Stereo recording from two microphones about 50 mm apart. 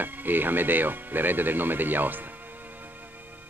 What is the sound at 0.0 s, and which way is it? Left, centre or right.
Speech, right.